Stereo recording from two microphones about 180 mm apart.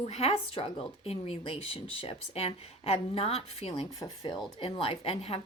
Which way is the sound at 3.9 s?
20° left (ahead or behind).